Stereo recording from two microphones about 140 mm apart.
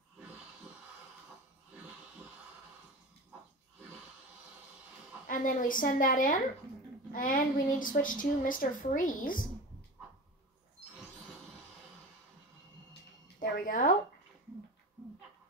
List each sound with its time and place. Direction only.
5.3 s a woman's voice: 70° left (ahead or behind)
13.4 s speech: 75° left (ahead or behind)